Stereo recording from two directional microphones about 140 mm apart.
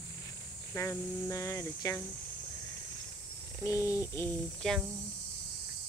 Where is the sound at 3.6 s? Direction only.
20° left (ahead or behind).